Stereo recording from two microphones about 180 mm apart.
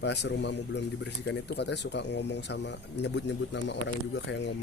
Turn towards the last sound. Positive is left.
turn(degrees=80)